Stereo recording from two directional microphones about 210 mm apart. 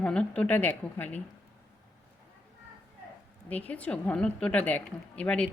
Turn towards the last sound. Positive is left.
turn(degrees=5)  # may be behind; listen again after turning